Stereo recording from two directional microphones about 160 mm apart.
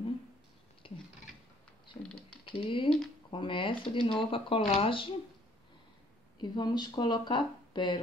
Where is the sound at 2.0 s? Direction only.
5° left (ahead or behind).